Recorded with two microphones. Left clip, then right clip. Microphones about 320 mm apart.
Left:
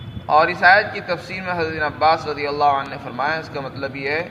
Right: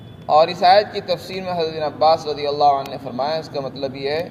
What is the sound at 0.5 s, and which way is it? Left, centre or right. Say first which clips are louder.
Speech: left 1 dB; centre.